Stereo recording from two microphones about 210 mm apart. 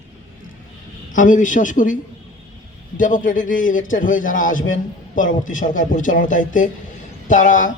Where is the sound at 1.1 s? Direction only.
40° left (ahead or behind).